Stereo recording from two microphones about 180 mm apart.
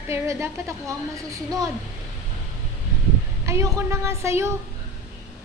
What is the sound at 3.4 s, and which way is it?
A woman's voice, 15° right (ahead or behind).